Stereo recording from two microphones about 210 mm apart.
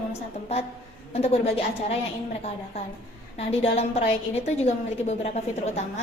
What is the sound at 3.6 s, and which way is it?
A woman's voice, 30° left (ahead or behind).